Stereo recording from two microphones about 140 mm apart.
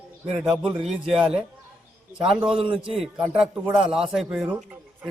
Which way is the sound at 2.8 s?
5° right (ahead or behind).